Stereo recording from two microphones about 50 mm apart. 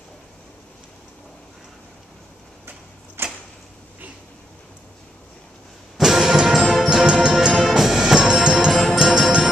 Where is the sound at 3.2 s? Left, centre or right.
Right.